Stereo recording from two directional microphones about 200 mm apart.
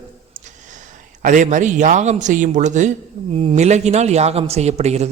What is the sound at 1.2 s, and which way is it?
A man's voice, 40° right (ahead or behind).